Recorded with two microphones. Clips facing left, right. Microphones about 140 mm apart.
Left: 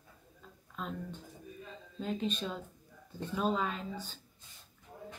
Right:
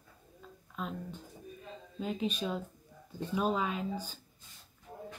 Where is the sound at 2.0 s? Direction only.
10° right (ahead or behind).